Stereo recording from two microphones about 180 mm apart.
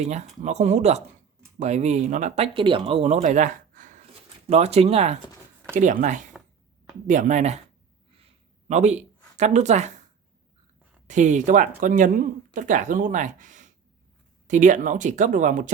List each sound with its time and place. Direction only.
0.0 s speech: 40° right (ahead or behind)
3.2 s gasp: 45° right (ahead or behind)
4.4 s speech: 35° right (ahead or behind)
8.1 s a sound: 30° right (ahead or behind)
11.1 s speech: 40° right (ahead or behind)